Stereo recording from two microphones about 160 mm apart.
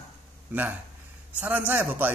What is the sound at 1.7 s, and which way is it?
Speech, 10° right (ahead or behind).